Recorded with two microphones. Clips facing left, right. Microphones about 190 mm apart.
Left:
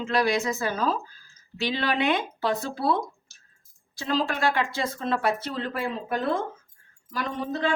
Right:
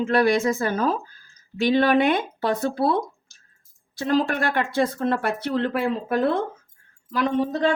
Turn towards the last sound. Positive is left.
turn(degrees=-55)  # may be behind; listen again after turning